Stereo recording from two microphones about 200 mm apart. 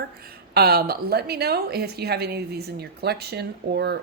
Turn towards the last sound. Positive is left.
turn(degrees=-55)  # may be behind; listen again after turning